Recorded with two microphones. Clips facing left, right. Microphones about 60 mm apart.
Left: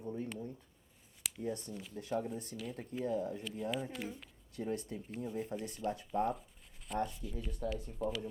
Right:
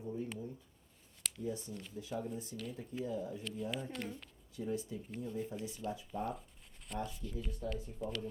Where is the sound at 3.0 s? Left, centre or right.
Left.